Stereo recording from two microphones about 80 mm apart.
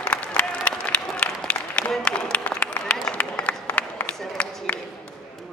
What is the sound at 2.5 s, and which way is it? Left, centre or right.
Run, centre.